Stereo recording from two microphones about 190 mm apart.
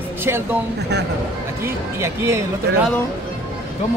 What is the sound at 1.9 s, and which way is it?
Speech, 15° right (ahead or behind).